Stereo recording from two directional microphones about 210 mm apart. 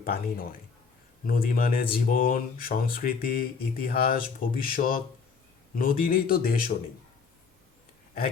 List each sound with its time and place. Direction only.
0.0 s speech: 45° left (ahead or behind)